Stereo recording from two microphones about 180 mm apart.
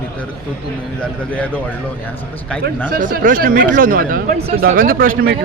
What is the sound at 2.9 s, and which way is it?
Speech, 50° right (ahead or behind).